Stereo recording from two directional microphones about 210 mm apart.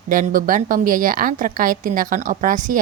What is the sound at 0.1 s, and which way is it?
A woman's voice, 40° right (ahead or behind).